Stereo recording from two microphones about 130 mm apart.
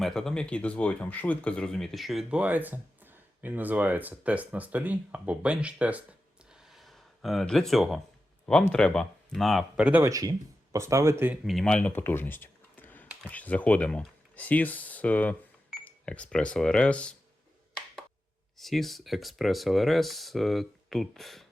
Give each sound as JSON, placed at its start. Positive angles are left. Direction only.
{"t": 0.0, "sound": "speech", "side_deg": 5}
{"t": 10.0, "sound": "speech", "side_deg": -25}
{"t": 11.4, "sound": "speech", "side_deg": 5}
{"t": 18.5, "sound": "speech", "side_deg": 0}